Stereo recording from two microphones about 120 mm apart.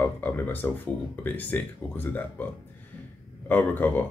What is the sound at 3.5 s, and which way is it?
Speech, 15° left (ahead or behind).